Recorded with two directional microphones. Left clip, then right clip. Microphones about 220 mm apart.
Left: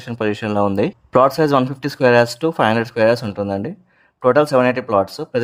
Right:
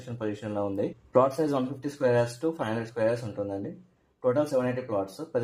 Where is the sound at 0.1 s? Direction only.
45° left (ahead or behind).